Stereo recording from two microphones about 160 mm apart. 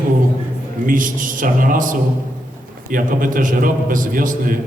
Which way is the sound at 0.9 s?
55° right (ahead or behind).